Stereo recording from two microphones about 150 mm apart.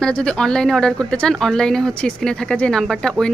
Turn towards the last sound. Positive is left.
turn(degrees=5)  # may be behind; listen again after turning